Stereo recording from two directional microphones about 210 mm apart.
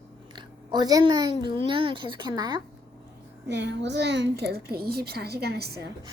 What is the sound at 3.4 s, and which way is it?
A woman's voice, 55° right (ahead or behind).